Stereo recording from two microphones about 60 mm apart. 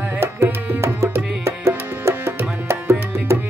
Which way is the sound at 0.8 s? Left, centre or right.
Right.